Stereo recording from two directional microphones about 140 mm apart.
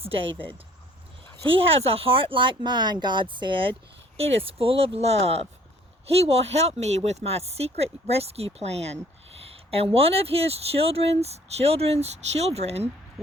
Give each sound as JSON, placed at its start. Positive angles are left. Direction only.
{"t": 1.5, "sound": "speech", "side_deg": -40}